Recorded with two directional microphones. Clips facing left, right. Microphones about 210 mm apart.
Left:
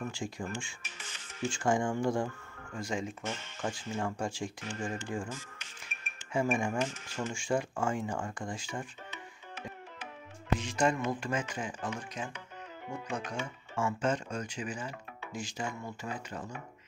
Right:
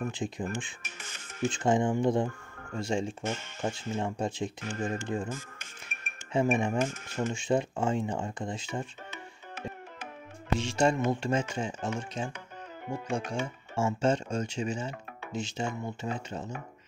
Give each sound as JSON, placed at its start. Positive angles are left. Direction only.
{"t": 0.0, "sound": "speech", "side_deg": -20}
{"t": 0.8, "sound": "music", "side_deg": -50}
{"t": 1.5, "sound": "speech", "side_deg": -20}
{"t": 4.6, "sound": "speech", "side_deg": -45}
{"t": 5.0, "sound": "speech", "side_deg": -20}
{"t": 6.3, "sound": "speech", "side_deg": -20}
{"t": 6.8, "sound": "speech", "side_deg": -50}
{"t": 7.2, "sound": "speech", "side_deg": -20}
{"t": 9.1, "sound": "tabla", "side_deg": -45}
{"t": 10.5, "sound": "speech", "side_deg": -25}